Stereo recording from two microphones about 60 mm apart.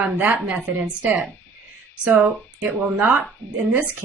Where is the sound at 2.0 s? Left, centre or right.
Right.